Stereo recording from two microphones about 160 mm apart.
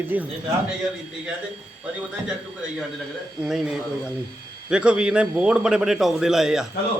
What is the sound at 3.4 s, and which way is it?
A man's voice, 5° right (ahead or behind).